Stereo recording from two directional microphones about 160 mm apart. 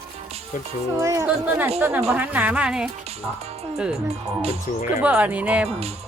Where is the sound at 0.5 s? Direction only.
55° left (ahead or behind).